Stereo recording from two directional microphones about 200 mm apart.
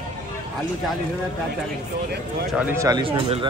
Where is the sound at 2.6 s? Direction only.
10° right (ahead or behind); by 3.4 s 25° right (ahead or behind).